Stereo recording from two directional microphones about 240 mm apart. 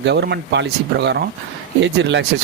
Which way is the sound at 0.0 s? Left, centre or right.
Right.